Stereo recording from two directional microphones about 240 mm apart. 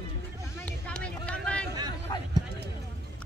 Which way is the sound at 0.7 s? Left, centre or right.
Centre.